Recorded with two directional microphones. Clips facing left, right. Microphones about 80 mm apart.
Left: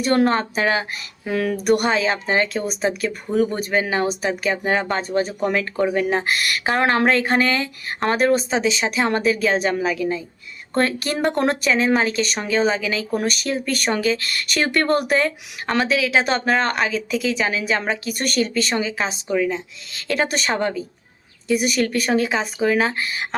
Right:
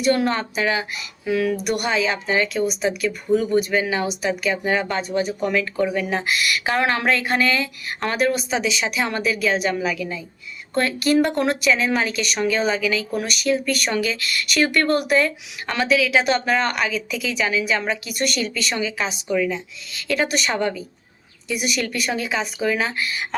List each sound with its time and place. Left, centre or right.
0.0 s speech: left